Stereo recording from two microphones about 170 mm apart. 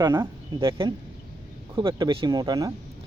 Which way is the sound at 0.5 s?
30° right (ahead or behind).